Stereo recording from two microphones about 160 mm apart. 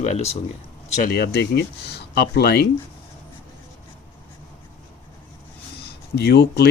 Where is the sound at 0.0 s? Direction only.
45° left (ahead or behind).